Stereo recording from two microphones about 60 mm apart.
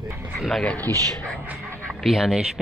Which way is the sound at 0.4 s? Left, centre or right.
Centre.